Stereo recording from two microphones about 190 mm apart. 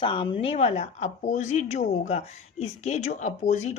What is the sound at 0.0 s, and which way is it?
Speech, 25° left (ahead or behind).